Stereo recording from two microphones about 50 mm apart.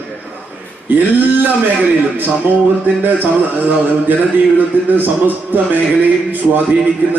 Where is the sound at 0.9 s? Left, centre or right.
Right.